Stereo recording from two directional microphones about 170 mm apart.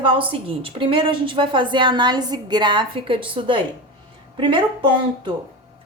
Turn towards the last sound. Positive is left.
turn(degrees=-30)  # may be behind; listen again after turning